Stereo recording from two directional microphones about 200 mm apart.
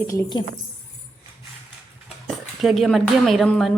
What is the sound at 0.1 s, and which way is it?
Speech, 20° left (ahead or behind).